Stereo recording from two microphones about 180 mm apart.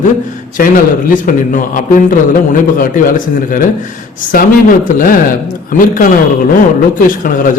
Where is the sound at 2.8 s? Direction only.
50° left (ahead or behind).